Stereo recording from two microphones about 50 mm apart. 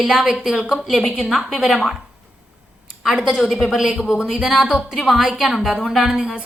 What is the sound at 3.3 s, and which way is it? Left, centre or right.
A woman's voice, centre.